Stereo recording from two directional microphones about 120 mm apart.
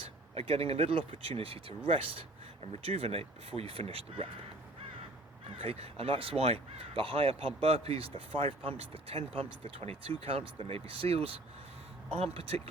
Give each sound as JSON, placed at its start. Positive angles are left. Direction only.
{"t": 0.0, "sound": "speech", "side_deg": -55}
{"t": 5.5, "sound": "speech", "side_deg": -55}